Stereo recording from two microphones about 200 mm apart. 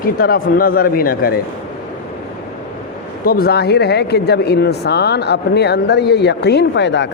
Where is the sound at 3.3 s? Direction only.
50° left (ahead or behind).